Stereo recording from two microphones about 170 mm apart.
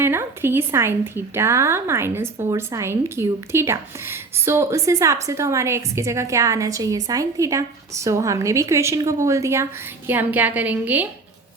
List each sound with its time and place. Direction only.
0.0 s a woman's voice: 15° right (ahead or behind)